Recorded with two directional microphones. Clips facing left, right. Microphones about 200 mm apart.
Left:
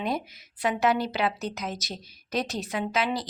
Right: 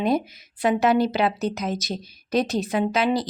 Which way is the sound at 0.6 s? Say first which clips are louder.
Right 5 dB; 45° right (ahead or behind).